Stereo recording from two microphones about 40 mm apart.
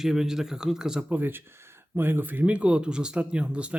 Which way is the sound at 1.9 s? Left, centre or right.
Right.